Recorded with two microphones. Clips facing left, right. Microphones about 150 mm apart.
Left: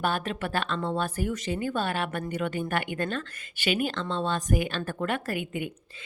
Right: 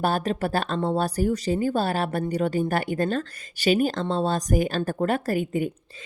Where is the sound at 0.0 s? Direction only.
35° right (ahead or behind).